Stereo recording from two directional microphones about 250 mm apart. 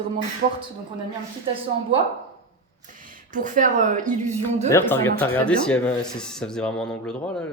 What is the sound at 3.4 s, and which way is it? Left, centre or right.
Speech, right.